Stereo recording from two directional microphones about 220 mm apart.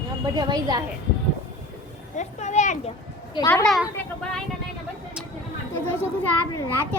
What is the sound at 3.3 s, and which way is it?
Speech, 15° left (ahead or behind).